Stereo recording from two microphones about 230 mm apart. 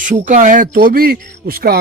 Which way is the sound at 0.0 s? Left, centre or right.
Right.